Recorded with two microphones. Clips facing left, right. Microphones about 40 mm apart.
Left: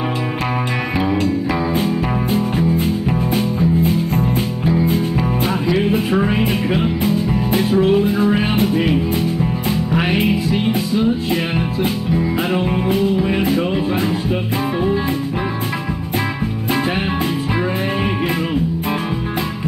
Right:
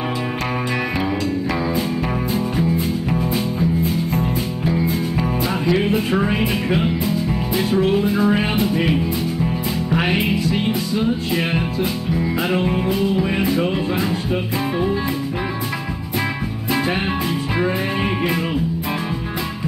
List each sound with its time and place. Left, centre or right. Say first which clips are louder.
6.1 s music: left 2 dB; centre
7.7 s music: left 3 dB; centre
8.0 s music: left 2 dB; left
12.5 s music: left 1 dB; centre